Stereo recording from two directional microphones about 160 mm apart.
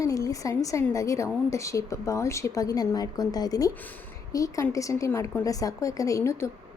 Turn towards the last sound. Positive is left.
turn(degrees=15)  # may be behind; listen again after turning